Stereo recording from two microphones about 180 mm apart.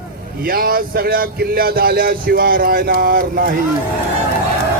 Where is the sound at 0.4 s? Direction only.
55° right (ahead or behind).